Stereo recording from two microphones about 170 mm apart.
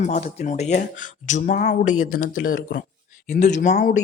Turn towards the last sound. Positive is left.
turn(degrees=45)  # may be behind; listen again after turning